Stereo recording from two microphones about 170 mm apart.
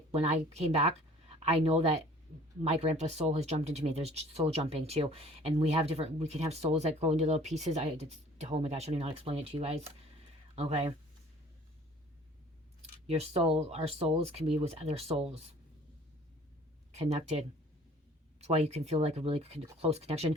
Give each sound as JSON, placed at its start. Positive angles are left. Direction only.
{"t": 0.1, "sound": "speech", "side_deg": -40}
{"t": 13.1, "sound": "speech", "side_deg": -40}
{"t": 16.9, "sound": "speech", "side_deg": -40}